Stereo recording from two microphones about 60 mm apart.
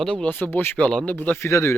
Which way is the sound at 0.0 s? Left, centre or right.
Centre.